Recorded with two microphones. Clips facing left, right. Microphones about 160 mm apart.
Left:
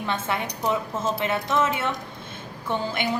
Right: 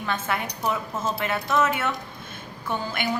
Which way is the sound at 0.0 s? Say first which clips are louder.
Left 1 dB; 25° left (ahead or behind).